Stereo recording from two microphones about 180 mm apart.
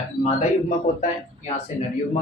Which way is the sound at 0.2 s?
35° left (ahead or behind).